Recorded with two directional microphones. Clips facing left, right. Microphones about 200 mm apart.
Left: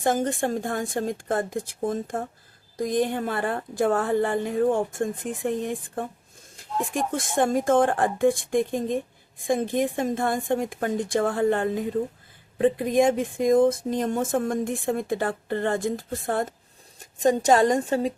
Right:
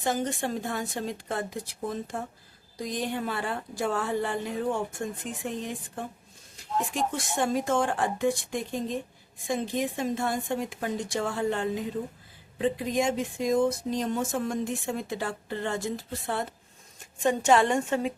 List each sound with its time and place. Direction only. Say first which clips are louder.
0.0 s a woman's voice: left 5 dB; 50° left (ahead or behind); by 18.1 s 35° left (ahead or behind)